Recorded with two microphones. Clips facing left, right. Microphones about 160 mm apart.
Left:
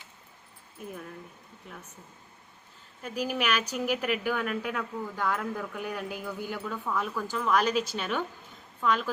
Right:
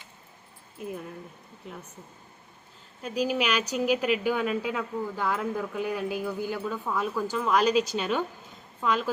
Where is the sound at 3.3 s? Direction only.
10° right (ahead or behind).